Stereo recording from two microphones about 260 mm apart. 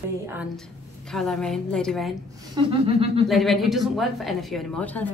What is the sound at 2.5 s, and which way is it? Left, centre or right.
Speech, centre.